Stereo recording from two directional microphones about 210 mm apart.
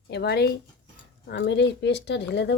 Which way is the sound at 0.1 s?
50° left (ahead or behind).